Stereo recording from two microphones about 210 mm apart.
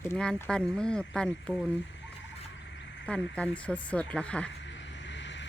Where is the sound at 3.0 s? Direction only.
5° left (ahead or behind).